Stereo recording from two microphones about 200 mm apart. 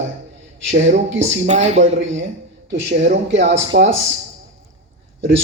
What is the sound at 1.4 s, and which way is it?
Speech, 35° right (ahead or behind).